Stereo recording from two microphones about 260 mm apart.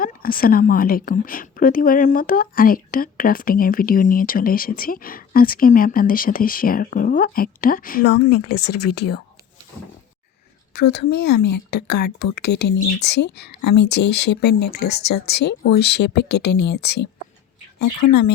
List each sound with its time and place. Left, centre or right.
0.0 s a woman's voice: left
8.4 s speech: left
8.8 s a woman's voice: left
10.8 s a woman's voice: left